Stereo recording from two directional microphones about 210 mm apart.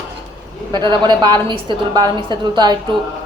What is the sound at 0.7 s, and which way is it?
A woman's voice, 20° right (ahead or behind).